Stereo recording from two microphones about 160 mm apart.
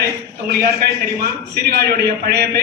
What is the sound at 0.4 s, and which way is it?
Speech, 75° right (ahead or behind).